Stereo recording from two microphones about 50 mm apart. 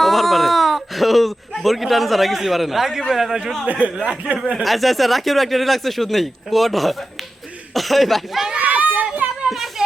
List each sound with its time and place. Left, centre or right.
0.0 s a sound: centre
1.6 s speech: centre
3.7 s speech: right
4.6 s speech: centre
8.6 s children playing: right
9.5 s a sound: centre